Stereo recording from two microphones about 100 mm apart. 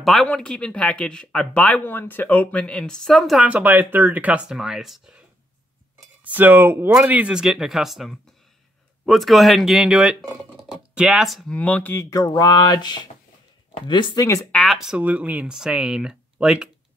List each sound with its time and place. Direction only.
0.0 s speech: centre (ahead or behind)
3.4 s speech: 15° right (ahead or behind)
6.2 s speech: 15° right (ahead or behind)
7.0 s speech: 15° right (ahead or behind)
11.5 s speech: 15° left (ahead or behind)
12.1 s speech: 35° left (ahead or behind)
14.5 s speech: centre (ahead or behind)